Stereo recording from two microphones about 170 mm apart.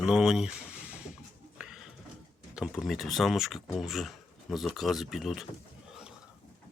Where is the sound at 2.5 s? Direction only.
Centre (ahead or behind).